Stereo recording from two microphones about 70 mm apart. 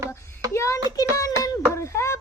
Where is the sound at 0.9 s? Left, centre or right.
Left.